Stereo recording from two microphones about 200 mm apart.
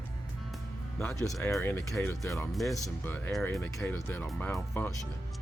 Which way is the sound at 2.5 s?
Centre (ahead or behind).